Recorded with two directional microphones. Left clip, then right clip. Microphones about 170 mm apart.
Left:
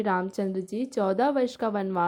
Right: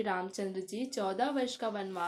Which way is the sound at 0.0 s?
55° left (ahead or behind).